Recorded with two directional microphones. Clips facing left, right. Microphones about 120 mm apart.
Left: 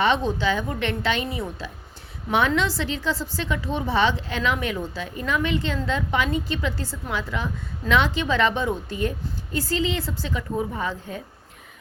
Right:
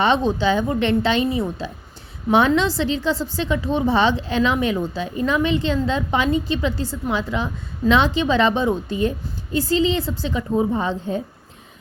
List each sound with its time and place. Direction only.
0.0 s a woman's voice: 25° right (ahead or behind)